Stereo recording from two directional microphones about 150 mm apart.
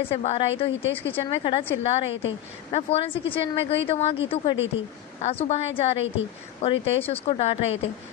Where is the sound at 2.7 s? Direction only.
40° left (ahead or behind).